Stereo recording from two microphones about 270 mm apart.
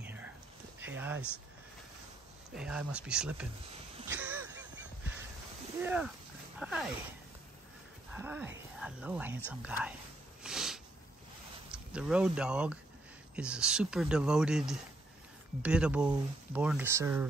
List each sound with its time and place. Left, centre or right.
0.0 s whispering: centre
0.7 s a sound: centre
2.5 s speech: centre
4.1 s crow: centre
5.8 s speech: centre
8.1 s speech: centre
10.4 s a sound: centre
11.7 s speech: centre